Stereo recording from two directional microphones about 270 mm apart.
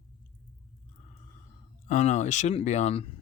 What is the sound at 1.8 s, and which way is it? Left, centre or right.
Speech, left.